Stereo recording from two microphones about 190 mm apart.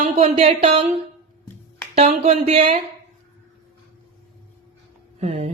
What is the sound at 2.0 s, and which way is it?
Speech, 35° right (ahead or behind).